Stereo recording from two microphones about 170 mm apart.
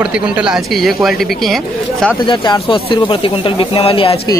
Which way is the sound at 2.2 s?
30° left (ahead or behind).